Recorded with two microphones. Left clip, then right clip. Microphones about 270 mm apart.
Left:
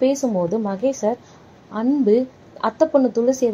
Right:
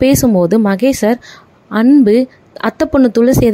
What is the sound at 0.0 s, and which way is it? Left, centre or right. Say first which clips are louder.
Speech: right 8 dB; right.